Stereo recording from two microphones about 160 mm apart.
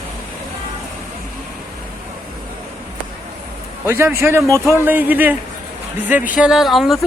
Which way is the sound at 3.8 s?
15° right (ahead or behind).